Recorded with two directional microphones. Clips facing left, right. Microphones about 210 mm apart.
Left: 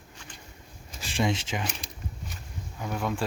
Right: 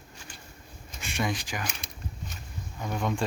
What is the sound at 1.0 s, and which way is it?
Speech, 30° left (ahead or behind).